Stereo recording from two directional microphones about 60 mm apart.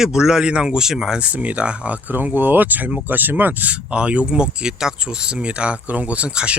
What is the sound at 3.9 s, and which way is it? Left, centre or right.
Speech, centre.